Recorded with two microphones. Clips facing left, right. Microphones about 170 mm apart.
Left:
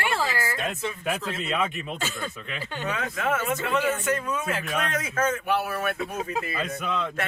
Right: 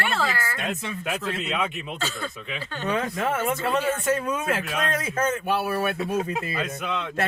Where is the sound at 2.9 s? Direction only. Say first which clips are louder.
Right 2 dB; 30° right (ahead or behind); by 4.7 s 50° right (ahead or behind).